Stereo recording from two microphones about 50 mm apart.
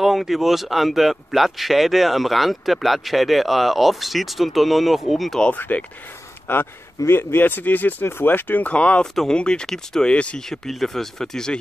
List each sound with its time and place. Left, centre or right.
0.0 s speech: centre
5.5 s speech: left
6.4 s speech: left
9.0 s speech: centre
9.3 s speech: centre
10.7 s speech: centre